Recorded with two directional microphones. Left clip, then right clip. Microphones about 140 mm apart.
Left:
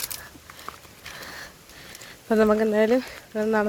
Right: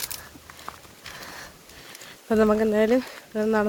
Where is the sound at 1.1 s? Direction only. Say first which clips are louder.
Left 1 dB; 5° right (ahead or behind).